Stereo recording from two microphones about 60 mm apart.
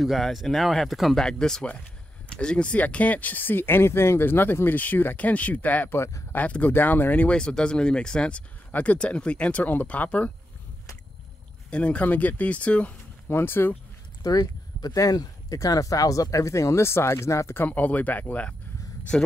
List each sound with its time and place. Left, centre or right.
0.0 s speech: centre
1.2 s speech: centre; by 7.3 s left
7.3 s speech: centre
11.7 s speech: left
13.3 s speech: left
14.2 s speech: left
17.6 s speech: left
19.1 s speech: centre